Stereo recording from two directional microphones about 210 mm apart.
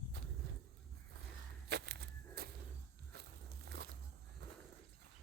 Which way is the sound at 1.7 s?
50° right (ahead or behind).